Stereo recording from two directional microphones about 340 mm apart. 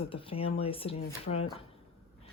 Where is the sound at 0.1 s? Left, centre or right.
Centre.